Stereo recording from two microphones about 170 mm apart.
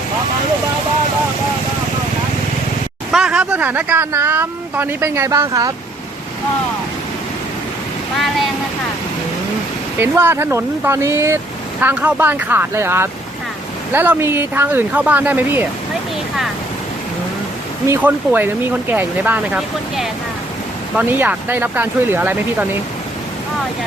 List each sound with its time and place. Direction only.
3.1 s speech: 5° right (ahead or behind); by 5.7 s 20° right (ahead or behind)
10.0 s speech: 15° right (ahead or behind)
17.8 s speech: 10° right (ahead or behind)